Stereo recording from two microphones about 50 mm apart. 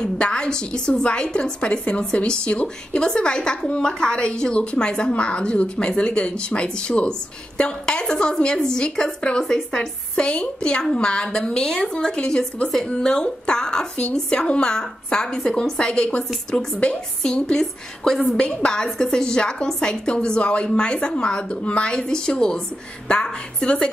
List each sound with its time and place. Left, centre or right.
0.0 s a woman's voice: centre